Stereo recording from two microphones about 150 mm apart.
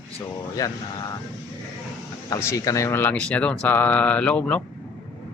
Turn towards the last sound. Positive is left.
turn(degrees=10)  # may be behind; listen again after turning